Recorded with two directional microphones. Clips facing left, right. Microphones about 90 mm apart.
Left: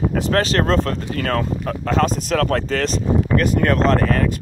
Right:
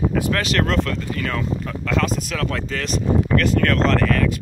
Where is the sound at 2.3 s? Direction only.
50° left (ahead or behind).